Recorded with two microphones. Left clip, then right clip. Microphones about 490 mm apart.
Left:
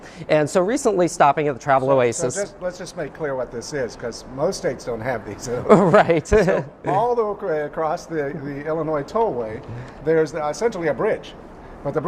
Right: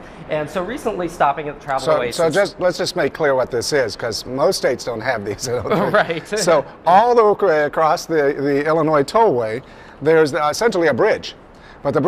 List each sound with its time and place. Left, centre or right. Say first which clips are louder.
0.3 s speech: left 4 dB; left
2.1 s speech: right 9 dB; right
5.6 s speech: left 4 dB; left
6.9 s speech: right 8 dB; right